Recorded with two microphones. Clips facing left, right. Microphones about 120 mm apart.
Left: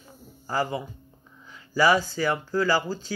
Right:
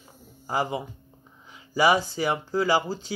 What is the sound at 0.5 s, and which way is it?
Speech, 20° right (ahead or behind).